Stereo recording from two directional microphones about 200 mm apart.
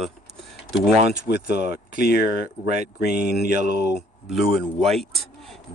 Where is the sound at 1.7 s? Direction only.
50° left (ahead or behind).